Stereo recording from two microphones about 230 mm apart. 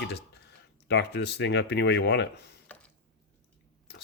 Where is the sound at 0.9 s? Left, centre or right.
Left.